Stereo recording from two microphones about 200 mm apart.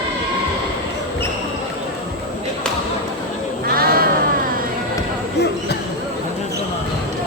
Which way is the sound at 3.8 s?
50° right (ahead or behind).